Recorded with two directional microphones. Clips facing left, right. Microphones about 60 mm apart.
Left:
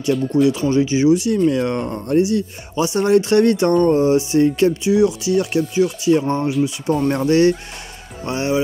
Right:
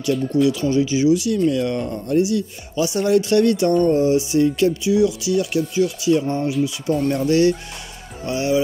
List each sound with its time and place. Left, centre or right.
0.5 s speech: left